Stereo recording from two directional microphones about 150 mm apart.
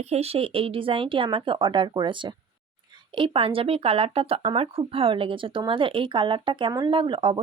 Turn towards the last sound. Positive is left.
turn(degrees=-35)  # may be behind; listen again after turning